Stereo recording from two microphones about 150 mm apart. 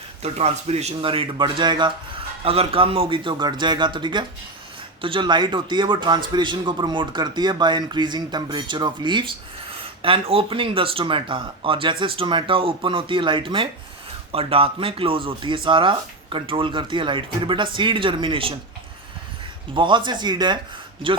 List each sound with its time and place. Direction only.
0.2 s a man's voice: 45° right (ahead or behind)
19.7 s a man's voice: 30° right (ahead or behind)